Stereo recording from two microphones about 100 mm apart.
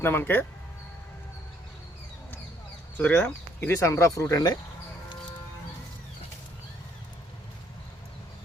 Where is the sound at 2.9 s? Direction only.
20° left (ahead or behind); by 4.6 s 40° left (ahead or behind).